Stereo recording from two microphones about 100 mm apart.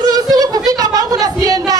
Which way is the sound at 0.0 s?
40° right (ahead or behind).